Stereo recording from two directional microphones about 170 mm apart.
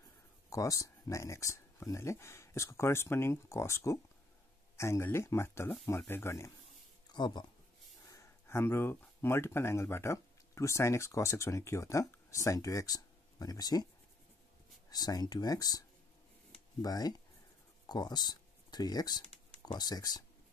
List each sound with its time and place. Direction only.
0.5 s speech: 20° left (ahead or behind)
7.1 s speech: 25° left (ahead or behind)
8.1 s speech: 15° left (ahead or behind)
14.9 s speech: 20° left (ahead or behind)
16.8 s speech: 20° left (ahead or behind)